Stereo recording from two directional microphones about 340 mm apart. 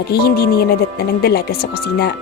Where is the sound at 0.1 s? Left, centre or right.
Left.